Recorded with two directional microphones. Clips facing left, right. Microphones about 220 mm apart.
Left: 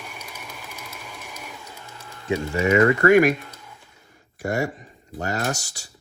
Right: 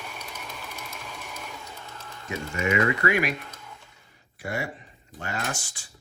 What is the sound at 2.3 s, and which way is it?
Speech, 35° left (ahead or behind).